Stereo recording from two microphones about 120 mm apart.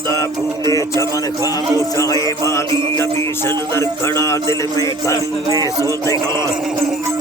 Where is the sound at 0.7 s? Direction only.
25° left (ahead or behind).